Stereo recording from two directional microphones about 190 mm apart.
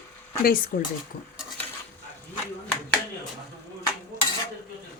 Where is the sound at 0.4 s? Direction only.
50° left (ahead or behind).